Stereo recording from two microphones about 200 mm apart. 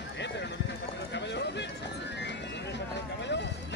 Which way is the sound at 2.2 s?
60° left (ahead or behind).